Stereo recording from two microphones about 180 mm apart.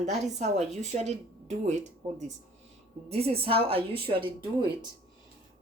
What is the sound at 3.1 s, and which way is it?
Speech, 35° right (ahead or behind).